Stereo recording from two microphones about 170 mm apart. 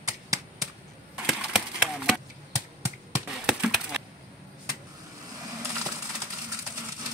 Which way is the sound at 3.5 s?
Centre (ahead or behind).